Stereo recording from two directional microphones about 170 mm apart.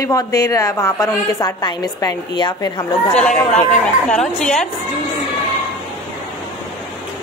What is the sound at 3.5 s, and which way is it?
Speech, 45° left (ahead or behind).